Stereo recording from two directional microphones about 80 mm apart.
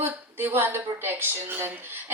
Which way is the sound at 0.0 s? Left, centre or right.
Right.